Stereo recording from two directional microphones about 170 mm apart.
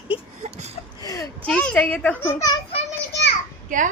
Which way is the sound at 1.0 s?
20° left (ahead or behind).